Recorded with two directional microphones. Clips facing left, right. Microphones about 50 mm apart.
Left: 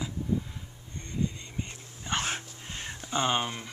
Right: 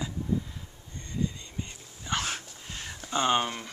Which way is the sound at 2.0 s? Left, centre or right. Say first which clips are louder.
Even; left.